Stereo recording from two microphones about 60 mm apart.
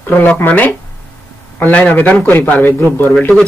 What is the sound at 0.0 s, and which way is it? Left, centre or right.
A man's voice, left.